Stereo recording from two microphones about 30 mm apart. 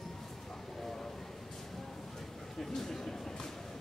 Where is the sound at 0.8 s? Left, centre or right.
Centre.